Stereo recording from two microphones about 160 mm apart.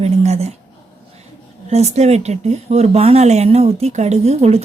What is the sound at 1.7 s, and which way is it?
Speech, 40° right (ahead or behind).